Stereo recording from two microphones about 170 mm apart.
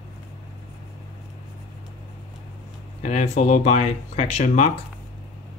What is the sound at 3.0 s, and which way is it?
Speech, 45° left (ahead or behind).